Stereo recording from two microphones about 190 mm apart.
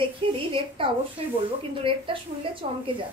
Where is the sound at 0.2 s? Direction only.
25° right (ahead or behind).